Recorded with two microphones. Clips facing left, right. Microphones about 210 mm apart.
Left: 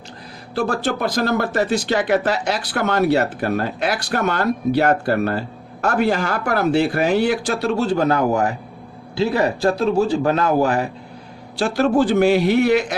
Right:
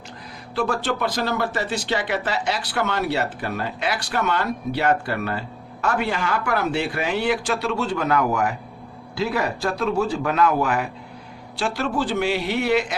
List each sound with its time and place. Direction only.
0.5 s a man's voice: 40° left (ahead or behind)